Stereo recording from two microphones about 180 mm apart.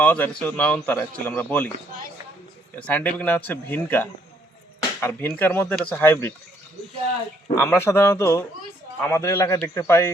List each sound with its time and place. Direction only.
0.0 s speech: 10° left (ahead or behind)
2.7 s speech: 10° left (ahead or behind)
7.5 s speech: 15° left (ahead or behind)